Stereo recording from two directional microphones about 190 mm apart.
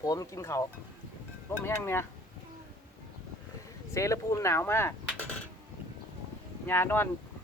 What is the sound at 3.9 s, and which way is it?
Speech, 15° left (ahead or behind).